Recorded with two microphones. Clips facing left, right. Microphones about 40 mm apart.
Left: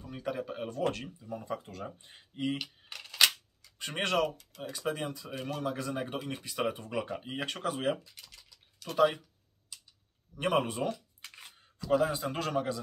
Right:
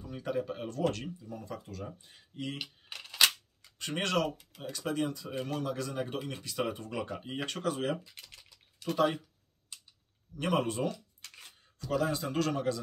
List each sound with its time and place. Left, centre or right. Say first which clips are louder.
0.0 s speech: right 2 dB; centre; by 2.2 s left
2.3 s speech: left 5 dB; centre
2.9 s a sound: left 1 dB; centre
3.7 s speech: left 1 dB; centre
8.0 s speech: right 2 dB; right
8.9 s speech: left 3 dB; centre
10.3 s speech: left 1 dB; centre
10.9 s a sound: left 3 dB; centre
11.9 s speech: left 3 dB; centre